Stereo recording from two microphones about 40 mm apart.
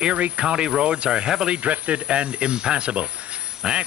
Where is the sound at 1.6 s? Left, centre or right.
Right.